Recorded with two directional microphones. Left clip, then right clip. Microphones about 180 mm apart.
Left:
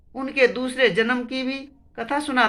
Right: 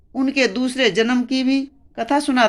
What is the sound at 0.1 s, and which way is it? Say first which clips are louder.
A woman's voice: right 1 dB; 45° right (ahead or behind).